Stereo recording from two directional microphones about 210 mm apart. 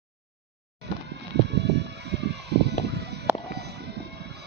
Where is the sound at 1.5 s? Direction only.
55° right (ahead or behind).